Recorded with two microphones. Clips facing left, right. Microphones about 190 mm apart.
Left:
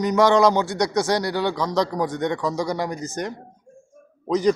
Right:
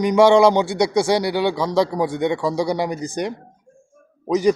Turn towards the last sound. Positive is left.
turn(degrees=-10)  # may be behind; listen again after turning